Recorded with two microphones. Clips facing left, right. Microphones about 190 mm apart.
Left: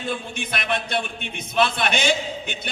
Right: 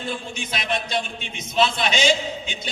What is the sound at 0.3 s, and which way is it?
A man's voice, 55° left (ahead or behind).